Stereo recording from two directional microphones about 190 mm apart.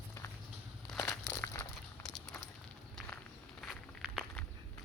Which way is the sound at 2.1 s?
Centre (ahead or behind).